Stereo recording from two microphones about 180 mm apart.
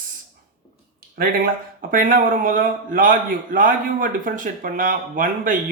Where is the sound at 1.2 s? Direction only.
50° right (ahead or behind).